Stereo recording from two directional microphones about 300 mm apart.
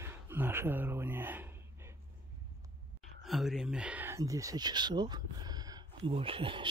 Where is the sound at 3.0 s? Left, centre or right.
Centre.